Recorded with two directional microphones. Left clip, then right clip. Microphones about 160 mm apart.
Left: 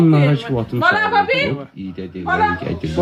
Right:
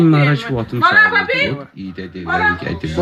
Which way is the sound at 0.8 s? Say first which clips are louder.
Right 3 dB; 60° left (ahead or behind).